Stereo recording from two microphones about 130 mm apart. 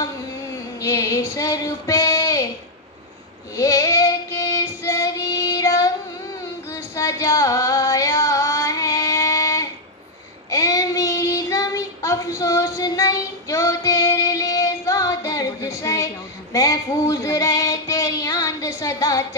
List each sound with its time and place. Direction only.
0.7 s female singing: 25° left (ahead or behind)
3.5 s child singing: 25° left (ahead or behind)
6.7 s music: 25° left (ahead or behind)
10.5 s child singing: 25° left (ahead or behind)
16.5 s female singing: 25° left (ahead or behind)